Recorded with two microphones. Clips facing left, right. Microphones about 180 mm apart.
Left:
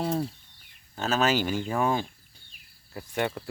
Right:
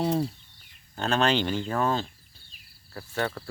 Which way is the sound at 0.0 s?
Centre (ahead or behind).